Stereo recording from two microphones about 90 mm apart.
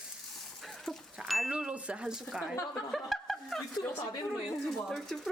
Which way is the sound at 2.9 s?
Centre (ahead or behind).